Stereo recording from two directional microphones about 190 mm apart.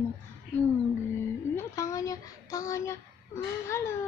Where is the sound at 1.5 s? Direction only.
15° left (ahead or behind).